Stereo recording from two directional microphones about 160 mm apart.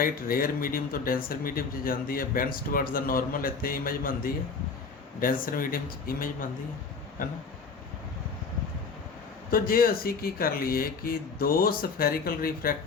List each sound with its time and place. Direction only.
0.0 s speech: 65° left (ahead or behind)
9.5 s speech: 65° left (ahead or behind)